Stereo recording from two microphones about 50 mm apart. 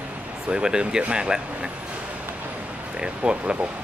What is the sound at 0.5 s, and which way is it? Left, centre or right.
Speech, centre.